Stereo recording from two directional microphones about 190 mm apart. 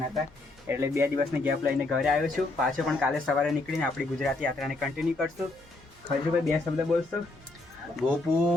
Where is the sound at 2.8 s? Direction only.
Centre (ahead or behind).